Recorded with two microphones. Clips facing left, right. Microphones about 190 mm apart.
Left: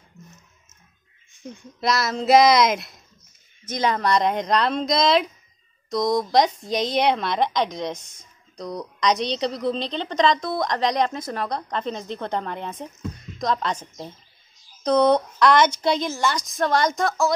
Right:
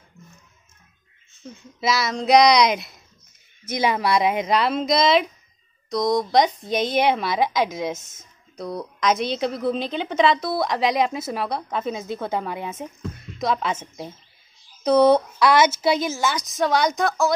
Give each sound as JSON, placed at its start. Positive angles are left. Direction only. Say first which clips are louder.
{"t": 0.2, "sound": "music", "louder": "left 2 dB", "side_deg": 40}
{"t": 1.3, "sound": "speech", "louder": "left 2 dB", "side_deg": 15}
{"t": 1.8, "sound": "a woman's voice", "louder": "even", "side_deg": 0}